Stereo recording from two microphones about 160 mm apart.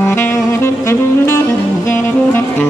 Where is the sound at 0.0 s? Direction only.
15° left (ahead or behind).